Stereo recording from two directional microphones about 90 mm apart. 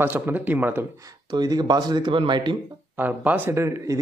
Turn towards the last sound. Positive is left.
turn(degrees=-35)  # may be behind; listen again after turning